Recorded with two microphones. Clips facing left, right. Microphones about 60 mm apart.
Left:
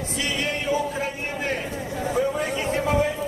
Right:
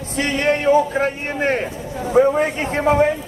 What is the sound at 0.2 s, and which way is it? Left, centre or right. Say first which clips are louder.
A man's voice: right 9 dB; right.